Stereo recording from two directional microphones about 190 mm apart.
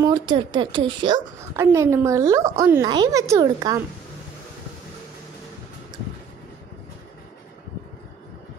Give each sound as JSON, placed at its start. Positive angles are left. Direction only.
{"t": 0.0, "sound": "speech", "side_deg": -20}
{"t": 1.6, "sound": "a woman's voice", "side_deg": -15}